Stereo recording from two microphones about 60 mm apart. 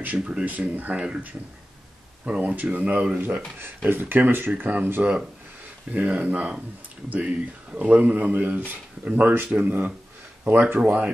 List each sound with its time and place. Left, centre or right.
0.0 s speech: right
5.9 s speech: right